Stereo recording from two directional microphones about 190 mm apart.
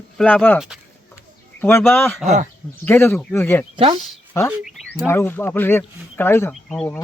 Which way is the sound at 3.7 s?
25° right (ahead or behind).